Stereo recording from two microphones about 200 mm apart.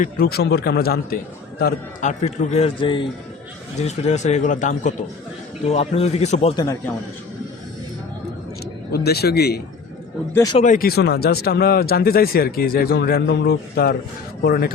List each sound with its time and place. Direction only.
0.0 s a man's voice: 50° left (ahead or behind); by 3.1 s 25° left (ahead or behind)
3.8 s a man's voice: 35° left (ahead or behind)
8.9 s speech: 50° left (ahead or behind)
10.3 s speech: 15° left (ahead or behind)
10.6 s speech: 45° left (ahead or behind)